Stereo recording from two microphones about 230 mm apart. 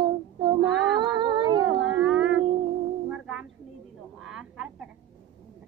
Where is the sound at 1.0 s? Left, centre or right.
Centre.